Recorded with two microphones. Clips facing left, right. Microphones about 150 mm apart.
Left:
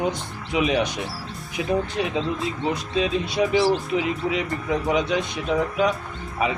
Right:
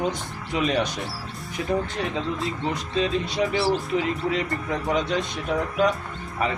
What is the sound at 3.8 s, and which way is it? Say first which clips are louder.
Speech: left 1 dB; centre (ahead or behind).